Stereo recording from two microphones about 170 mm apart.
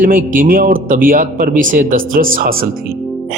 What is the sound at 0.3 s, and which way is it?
A man's voice, 55° right (ahead or behind).